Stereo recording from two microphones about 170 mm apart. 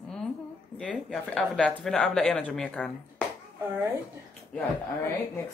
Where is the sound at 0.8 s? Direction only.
5° left (ahead or behind).